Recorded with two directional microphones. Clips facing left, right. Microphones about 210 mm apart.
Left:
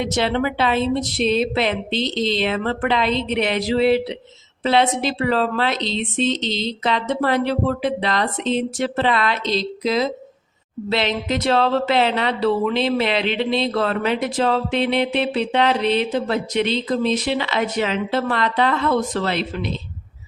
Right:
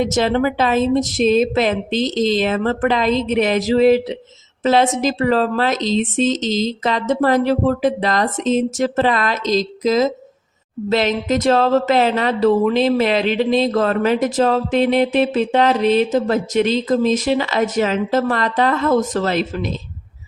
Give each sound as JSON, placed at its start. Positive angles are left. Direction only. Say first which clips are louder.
{"t": 0.0, "sound": "speech", "louder": "right 4 dB", "side_deg": -45}